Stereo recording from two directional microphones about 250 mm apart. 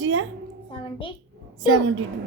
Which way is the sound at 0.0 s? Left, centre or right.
Right.